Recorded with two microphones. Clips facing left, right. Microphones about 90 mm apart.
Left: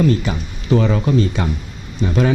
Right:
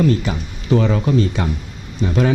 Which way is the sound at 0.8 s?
20° left (ahead or behind).